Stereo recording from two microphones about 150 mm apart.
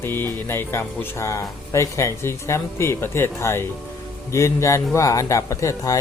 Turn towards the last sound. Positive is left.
turn(degrees=20)  # may be behind; listen again after turning